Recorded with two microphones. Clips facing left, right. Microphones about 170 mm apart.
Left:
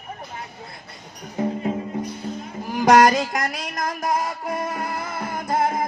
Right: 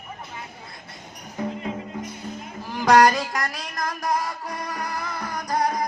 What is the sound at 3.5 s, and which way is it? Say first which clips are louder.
Music: left 3 dB; 20° left (ahead or behind).